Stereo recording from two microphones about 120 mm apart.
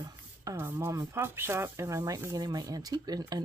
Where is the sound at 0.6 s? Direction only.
20° right (ahead or behind).